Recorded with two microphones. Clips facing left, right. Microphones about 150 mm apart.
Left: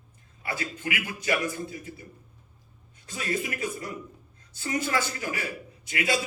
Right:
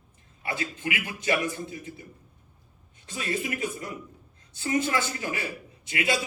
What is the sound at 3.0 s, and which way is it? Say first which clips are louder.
A man's voice: even; 25° right (ahead or behind).